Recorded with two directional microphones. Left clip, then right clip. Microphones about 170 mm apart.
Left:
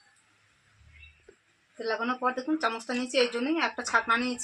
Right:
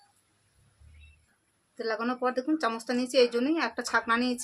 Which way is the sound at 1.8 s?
25° right (ahead or behind).